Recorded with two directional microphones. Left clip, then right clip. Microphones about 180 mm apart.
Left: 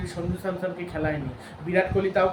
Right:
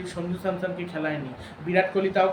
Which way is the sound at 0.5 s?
5° right (ahead or behind).